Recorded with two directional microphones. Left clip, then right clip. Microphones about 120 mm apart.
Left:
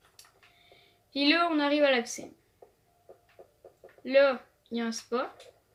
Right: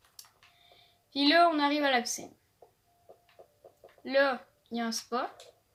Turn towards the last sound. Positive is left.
turn(degrees=-55)  # may be behind; listen again after turning